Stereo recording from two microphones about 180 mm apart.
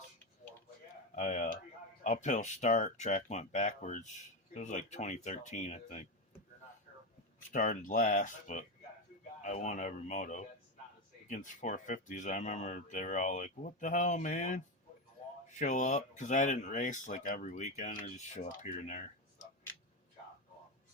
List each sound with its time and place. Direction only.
1.1 s speech: 45° left (ahead or behind)
7.5 s speech: 45° left (ahead or behind)